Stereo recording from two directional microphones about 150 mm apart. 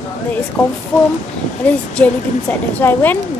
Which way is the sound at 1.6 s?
10° left (ahead or behind).